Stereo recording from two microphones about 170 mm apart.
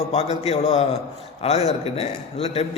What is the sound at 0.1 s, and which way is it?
A man's voice, 40° left (ahead or behind).